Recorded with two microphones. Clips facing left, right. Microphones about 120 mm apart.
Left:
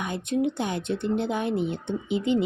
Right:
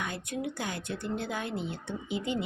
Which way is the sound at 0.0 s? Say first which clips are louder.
Left 9 dB; 20° left (ahead or behind).